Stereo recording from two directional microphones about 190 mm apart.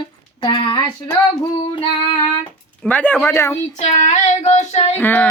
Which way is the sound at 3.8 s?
40° left (ahead or behind).